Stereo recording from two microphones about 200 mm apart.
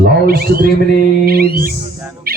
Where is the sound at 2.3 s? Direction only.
50° right (ahead or behind).